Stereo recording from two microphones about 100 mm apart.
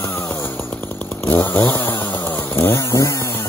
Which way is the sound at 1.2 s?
20° left (ahead or behind).